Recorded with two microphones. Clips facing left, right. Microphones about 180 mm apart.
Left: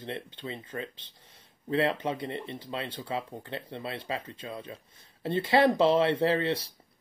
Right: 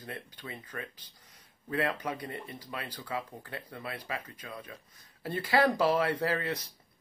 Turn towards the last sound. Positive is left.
turn(degrees=30)  # may be behind; listen again after turning